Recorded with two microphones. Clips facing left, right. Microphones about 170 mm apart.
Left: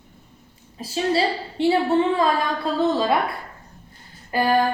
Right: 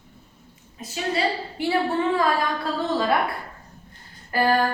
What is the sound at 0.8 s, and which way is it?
A woman's voice, 30° left (ahead or behind).